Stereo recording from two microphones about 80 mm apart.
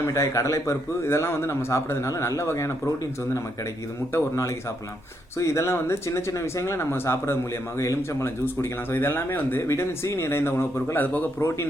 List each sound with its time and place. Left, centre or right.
0.0 s a man's voice: left
4.1 s a man's voice: left
8.9 s speech: left